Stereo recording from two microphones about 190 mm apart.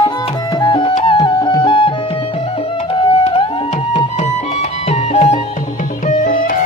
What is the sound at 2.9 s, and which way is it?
Music, 25° left (ahead or behind).